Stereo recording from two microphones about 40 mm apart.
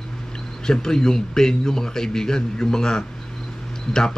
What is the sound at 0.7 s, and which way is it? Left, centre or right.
A man's voice, centre.